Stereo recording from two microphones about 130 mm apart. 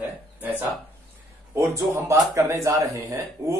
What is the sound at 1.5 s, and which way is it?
Speech, 20° right (ahead or behind).